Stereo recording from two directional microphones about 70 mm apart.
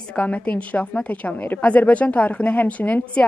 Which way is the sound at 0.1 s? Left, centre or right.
Centre.